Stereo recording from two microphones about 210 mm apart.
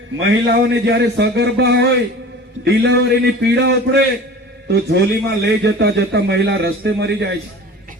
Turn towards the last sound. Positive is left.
turn(degrees=-55)  # may be behind; listen again after turning